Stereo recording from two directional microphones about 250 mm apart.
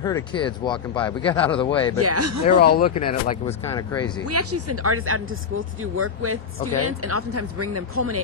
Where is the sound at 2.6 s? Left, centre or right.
Left.